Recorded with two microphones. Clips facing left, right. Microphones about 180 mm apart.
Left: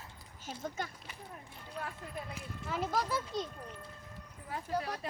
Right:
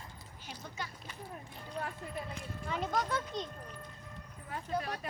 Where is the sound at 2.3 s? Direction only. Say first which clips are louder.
Right 1 dB; 5° left (ahead or behind).